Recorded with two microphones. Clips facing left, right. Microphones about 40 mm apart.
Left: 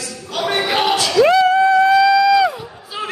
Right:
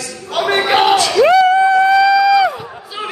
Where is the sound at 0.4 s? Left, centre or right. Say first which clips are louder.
Right 5 dB; centre.